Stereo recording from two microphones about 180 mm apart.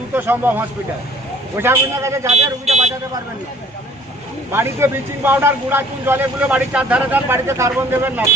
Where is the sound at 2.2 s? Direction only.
35° right (ahead or behind).